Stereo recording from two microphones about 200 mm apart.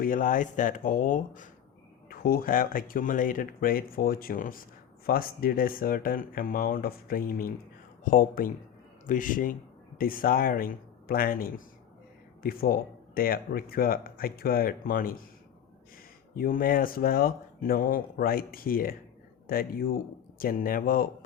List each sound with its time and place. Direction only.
0.0 s speech: 45° left (ahead or behind)
16.3 s speech: 45° left (ahead or behind)